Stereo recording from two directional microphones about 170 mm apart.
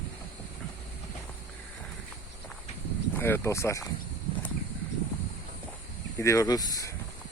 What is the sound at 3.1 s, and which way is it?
Speech, 15° left (ahead or behind).